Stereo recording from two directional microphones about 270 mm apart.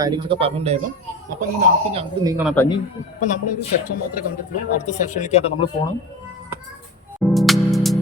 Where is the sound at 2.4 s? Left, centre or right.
Centre.